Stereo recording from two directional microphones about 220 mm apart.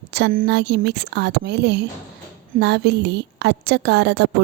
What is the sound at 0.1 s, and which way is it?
A woman's voice, 45° right (ahead or behind).